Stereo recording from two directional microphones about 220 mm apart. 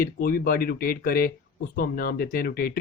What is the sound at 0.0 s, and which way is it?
Speech, 40° left (ahead or behind).